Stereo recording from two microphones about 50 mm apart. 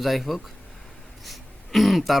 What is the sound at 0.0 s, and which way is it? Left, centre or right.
Speech, centre.